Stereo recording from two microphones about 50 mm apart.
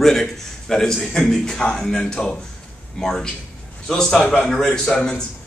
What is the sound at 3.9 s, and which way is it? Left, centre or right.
A man's voice, centre.